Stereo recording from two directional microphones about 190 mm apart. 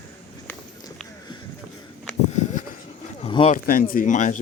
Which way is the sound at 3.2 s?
30° left (ahead or behind).